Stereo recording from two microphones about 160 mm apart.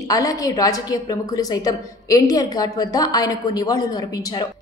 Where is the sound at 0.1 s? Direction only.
20° left (ahead or behind).